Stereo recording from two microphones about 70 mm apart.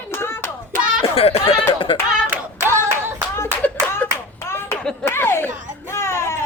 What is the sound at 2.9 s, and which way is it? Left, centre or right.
Clapping, right.